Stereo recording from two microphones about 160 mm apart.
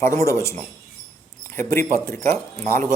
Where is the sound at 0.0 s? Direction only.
15° left (ahead or behind).